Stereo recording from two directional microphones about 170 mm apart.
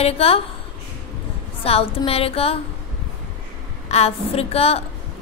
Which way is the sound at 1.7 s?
35° left (ahead or behind).